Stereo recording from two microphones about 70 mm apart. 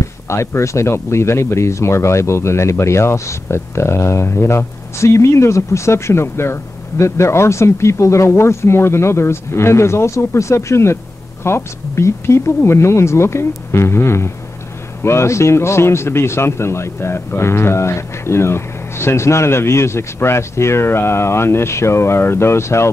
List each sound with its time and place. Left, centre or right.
0.3 s speech: left